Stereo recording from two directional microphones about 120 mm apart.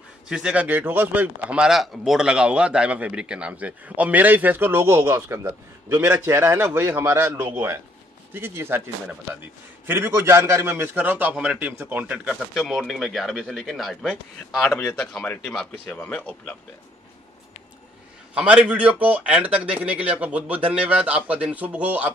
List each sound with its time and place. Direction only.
0.3 s a man's voice: 10° right (ahead or behind)
12.3 s speech: centre (ahead or behind)
14.8 s speech: 10° left (ahead or behind)
18.3 s speech: 10° right (ahead or behind)